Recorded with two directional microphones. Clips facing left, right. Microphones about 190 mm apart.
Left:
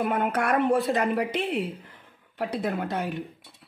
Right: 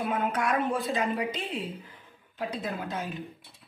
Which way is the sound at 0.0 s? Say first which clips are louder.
Left 3 dB; 60° left (ahead or behind).